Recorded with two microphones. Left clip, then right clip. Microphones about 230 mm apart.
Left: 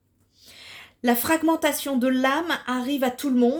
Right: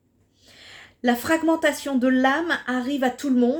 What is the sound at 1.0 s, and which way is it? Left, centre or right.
Speech, left.